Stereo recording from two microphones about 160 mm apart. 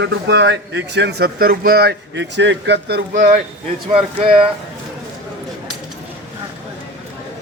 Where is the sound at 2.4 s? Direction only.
90° right.